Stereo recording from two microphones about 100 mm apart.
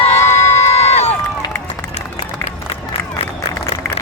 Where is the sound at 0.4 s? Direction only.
90° left.